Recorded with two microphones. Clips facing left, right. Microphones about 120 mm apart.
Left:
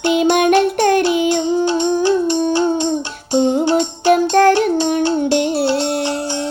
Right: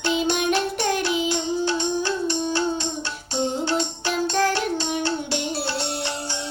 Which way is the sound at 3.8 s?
50° left (ahead or behind).